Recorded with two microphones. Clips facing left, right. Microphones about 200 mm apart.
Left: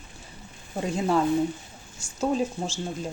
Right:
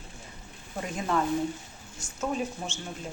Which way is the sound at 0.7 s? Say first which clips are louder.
Left 5 dB; 30° left (ahead or behind).